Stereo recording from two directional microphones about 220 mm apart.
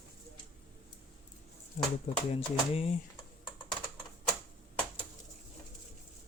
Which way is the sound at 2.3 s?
25° left (ahead or behind).